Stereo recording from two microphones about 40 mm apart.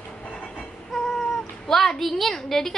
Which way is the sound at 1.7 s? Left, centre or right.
Centre.